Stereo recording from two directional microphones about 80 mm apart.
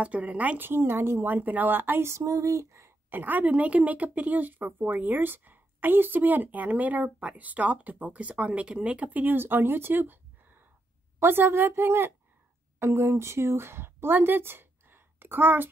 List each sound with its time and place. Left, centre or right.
0.0 s a woman's voice: centre; by 2.9 s right
3.1 s a woman's voice: right
11.1 s a woman's voice: right